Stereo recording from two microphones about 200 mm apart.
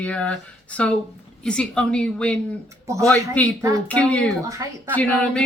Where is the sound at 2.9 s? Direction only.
15° right (ahead or behind).